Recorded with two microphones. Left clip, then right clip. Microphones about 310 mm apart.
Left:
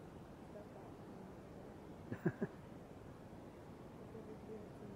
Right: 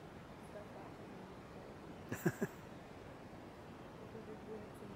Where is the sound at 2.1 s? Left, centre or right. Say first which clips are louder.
Right 3 dB; centre.